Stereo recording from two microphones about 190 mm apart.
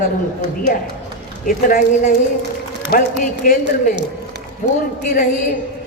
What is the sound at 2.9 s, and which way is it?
Speech, 55° left (ahead or behind).